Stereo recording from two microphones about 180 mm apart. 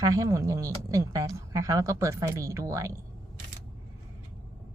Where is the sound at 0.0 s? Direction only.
20° right (ahead or behind).